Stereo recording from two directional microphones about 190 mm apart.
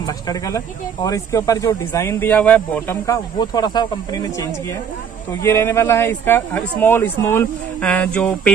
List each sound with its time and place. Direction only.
0.0 s speech: 20° left (ahead or behind)